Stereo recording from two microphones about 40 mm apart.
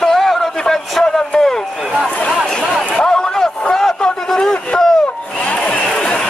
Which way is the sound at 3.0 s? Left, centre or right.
Centre.